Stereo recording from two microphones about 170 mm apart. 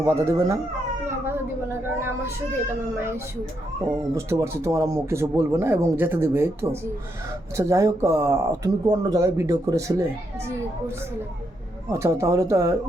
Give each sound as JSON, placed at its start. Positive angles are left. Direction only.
{"t": 0.0, "sound": "speech", "side_deg": -15}
{"t": 4.1, "sound": "speech", "side_deg": -15}
{"t": 11.9, "sound": "speech", "side_deg": -15}